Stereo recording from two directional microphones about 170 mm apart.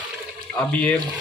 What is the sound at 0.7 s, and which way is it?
Speech, 10° left (ahead or behind).